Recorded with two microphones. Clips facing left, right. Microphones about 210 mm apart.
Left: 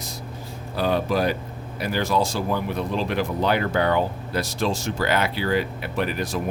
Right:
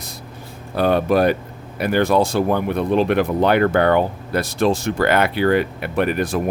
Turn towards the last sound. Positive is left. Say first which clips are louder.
# right 6 dB
turn(degrees=-55)  # may be behind; listen again after turning